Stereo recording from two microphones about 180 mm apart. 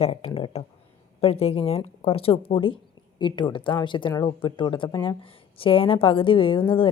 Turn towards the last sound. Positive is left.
turn(degrees=30)  # may be behind; listen again after turning